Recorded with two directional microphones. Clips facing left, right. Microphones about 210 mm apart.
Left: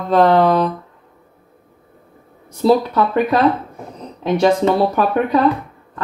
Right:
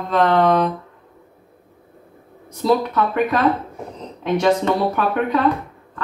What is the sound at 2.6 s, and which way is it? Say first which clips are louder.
Speech: left 4 dB; 35° left (ahead or behind).